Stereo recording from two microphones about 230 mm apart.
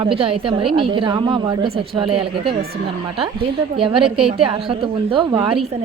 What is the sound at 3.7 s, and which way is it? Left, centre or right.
A woman's voice, right.